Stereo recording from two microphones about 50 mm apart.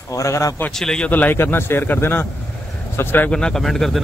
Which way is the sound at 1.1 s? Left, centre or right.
Left.